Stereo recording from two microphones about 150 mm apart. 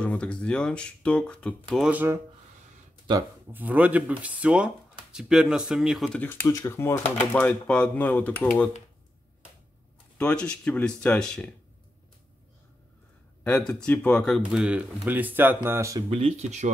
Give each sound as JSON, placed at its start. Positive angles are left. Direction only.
{"t": 0.0, "sound": "speech", "side_deg": 10}
{"t": 1.7, "sound": "speech", "side_deg": -5}
{"t": 3.5, "sound": "speech", "side_deg": -10}
{"t": 6.2, "sound": "speech", "side_deg": 15}
{"t": 10.1, "sound": "speech", "side_deg": 5}
{"t": 13.4, "sound": "speech", "side_deg": 5}
{"t": 14.4, "sound": "speech", "side_deg": -5}
{"t": 16.1, "sound": "speech", "side_deg": -40}